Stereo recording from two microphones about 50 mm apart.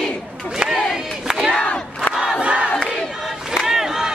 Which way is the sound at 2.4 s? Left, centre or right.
Right.